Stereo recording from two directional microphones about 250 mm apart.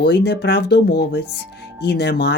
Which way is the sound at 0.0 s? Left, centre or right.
Left.